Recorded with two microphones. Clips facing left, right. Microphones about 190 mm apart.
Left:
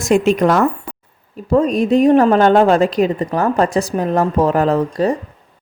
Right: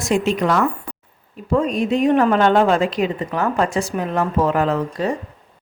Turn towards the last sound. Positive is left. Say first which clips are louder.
# left 5 dB
turn(degrees=40)  # may be behind; listen again after turning